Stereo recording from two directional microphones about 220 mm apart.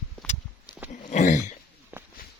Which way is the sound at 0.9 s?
35° left (ahead or behind).